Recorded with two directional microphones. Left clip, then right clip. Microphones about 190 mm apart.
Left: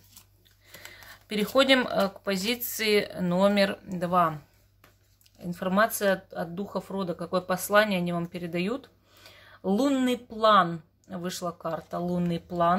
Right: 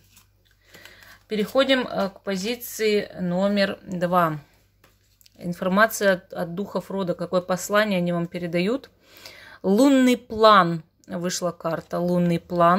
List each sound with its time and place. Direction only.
0.9 s speech: 5° right (ahead or behind)
3.6 s speech: 15° right (ahead or behind)
5.4 s speech: 25° right (ahead or behind)